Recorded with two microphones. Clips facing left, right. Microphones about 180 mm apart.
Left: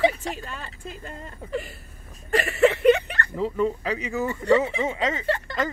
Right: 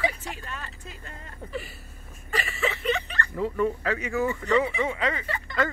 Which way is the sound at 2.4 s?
60° left (ahead or behind).